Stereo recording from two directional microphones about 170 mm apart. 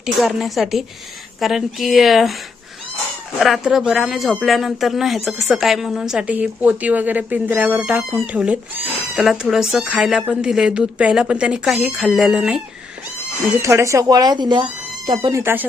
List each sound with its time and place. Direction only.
0.0 s speech: centre (ahead or behind)
3.3 s speech: centre (ahead or behind)
13.6 s speech: 15° right (ahead or behind)
15.3 s speech: 15° right (ahead or behind)